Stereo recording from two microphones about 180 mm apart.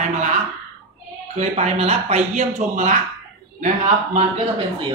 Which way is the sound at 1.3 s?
35° right (ahead or behind).